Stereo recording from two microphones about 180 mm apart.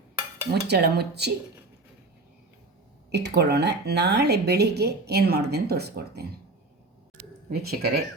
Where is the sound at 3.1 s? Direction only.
70° right (ahead or behind).